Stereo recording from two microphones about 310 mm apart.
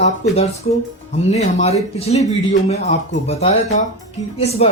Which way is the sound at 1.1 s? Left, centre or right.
Left.